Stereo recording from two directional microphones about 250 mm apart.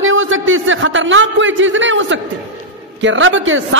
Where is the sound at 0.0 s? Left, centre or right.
Right.